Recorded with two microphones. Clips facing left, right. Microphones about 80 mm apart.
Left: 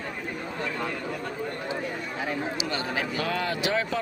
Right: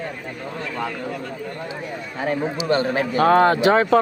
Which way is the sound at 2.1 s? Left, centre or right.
Right.